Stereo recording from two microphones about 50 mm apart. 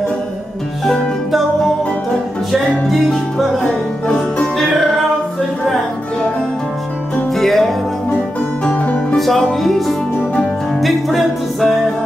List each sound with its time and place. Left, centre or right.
3.1 s music: centre
7.3 s music: centre
8.7 s music: left
9.1 s music: centre